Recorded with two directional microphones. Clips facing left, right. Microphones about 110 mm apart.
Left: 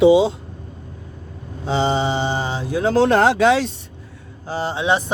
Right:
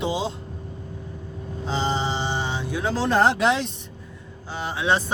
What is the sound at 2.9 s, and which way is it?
Speech, 65° left (ahead or behind).